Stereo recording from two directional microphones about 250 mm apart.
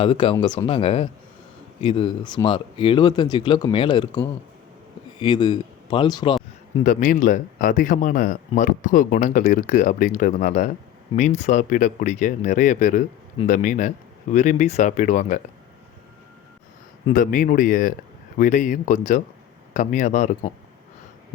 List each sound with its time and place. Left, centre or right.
0.0 s speech: left
5.2 s speech: centre
6.7 s speech: left
17.1 s speech: left